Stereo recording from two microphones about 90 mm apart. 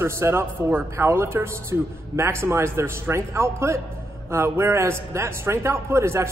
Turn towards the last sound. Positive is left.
turn(degrees=-30)  # may be behind; listen again after turning